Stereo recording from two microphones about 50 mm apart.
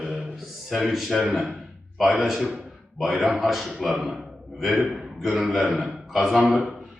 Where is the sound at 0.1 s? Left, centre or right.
Centre.